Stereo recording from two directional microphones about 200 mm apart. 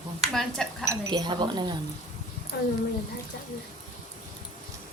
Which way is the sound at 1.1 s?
20° right (ahead or behind).